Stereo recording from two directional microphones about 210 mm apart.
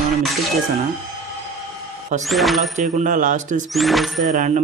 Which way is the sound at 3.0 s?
35° right (ahead or behind).